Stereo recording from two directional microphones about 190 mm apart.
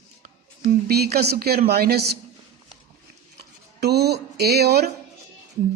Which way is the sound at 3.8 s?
60° right (ahead or behind).